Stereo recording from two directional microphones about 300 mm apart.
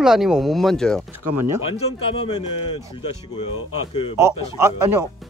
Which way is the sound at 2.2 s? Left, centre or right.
Centre.